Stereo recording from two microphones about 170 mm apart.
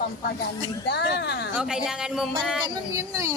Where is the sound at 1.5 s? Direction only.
5° right (ahead or behind).